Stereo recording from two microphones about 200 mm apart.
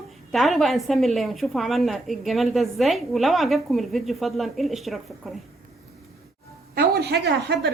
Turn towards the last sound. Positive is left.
turn(degrees=-55)  # may be behind; listen again after turning